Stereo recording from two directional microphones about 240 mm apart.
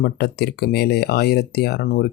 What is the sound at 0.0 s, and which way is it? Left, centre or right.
Speech, left.